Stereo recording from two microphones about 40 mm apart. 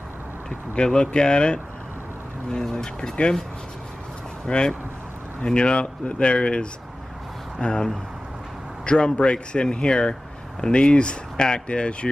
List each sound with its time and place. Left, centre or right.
0.8 s speech: left
2.7 s speech: centre
4.5 s speech: left